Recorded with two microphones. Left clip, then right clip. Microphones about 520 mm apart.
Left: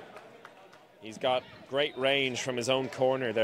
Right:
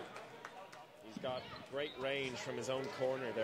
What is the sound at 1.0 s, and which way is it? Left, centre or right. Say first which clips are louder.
Speech: left 13 dB; left.